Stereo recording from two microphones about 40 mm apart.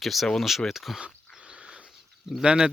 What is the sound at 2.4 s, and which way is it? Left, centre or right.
Speech, right.